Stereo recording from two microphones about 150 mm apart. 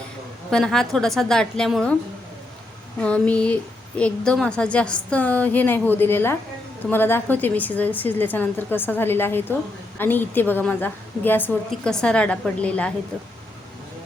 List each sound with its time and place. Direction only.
0.5 s a woman's voice: 5° left (ahead or behind)
3.0 s a woman's voice: 10° left (ahead or behind)